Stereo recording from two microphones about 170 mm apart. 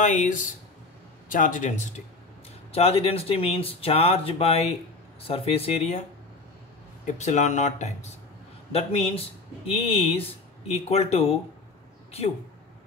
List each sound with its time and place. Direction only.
0.0 s speech: 45° left (ahead or behind)
2.7 s speech: 35° left (ahead or behind)
7.2 s speech: 45° left (ahead or behind)